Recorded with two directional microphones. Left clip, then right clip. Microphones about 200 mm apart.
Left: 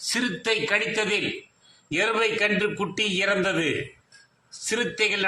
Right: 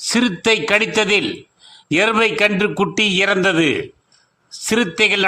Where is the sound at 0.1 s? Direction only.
40° right (ahead or behind).